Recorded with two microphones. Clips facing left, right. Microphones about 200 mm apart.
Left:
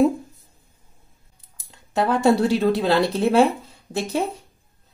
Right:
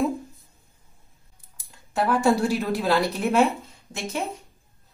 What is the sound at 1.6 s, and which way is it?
Speech, 20° left (ahead or behind).